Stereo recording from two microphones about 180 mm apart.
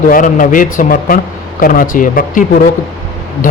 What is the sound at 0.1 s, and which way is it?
A man's voice, 50° left (ahead or behind).